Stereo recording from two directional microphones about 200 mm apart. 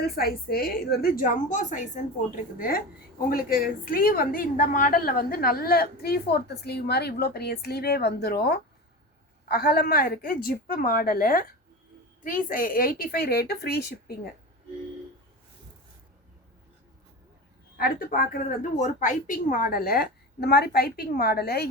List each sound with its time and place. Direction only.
0.0 s a woman's voice: 50° left (ahead or behind)
17.7 s a woman's voice: 50° left (ahead or behind)